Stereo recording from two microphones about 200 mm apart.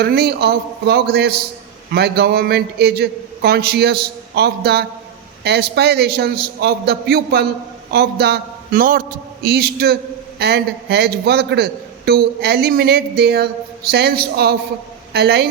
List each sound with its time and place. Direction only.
0.0 s a man's voice: 55° right (ahead or behind)